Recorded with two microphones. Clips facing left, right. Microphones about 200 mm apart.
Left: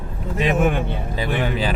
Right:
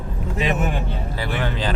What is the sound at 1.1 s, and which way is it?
Speech, 15° left (ahead or behind).